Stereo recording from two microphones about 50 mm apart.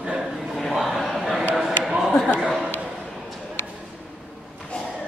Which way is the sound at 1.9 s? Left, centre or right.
Centre.